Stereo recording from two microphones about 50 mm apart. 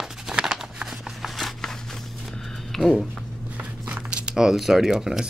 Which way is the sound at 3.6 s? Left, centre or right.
Right.